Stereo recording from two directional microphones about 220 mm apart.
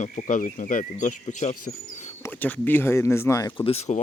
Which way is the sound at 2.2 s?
10° left (ahead or behind).